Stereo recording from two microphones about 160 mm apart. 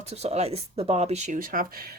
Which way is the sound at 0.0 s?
40° right (ahead or behind).